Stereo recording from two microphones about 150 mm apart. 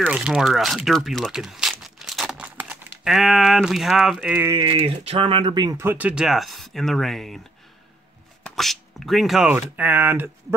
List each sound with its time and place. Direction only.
0.0 s speech: 10° right (ahead or behind)
4.6 s speech: 40° right (ahead or behind)
5.8 s speech: 10° right (ahead or behind)
8.5 s speech: centre (ahead or behind)
9.5 s speech: 10° right (ahead or behind)